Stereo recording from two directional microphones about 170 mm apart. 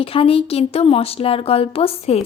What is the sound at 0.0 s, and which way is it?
A woman's voice, 35° left (ahead or behind).